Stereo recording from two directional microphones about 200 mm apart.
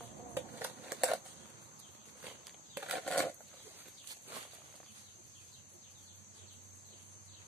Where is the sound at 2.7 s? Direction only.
10° right (ahead or behind).